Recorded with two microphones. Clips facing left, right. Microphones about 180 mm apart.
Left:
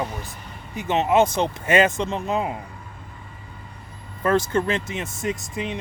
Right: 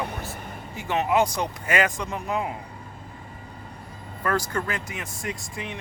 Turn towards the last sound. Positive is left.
turn(degrees=20)  # may be behind; listen again after turning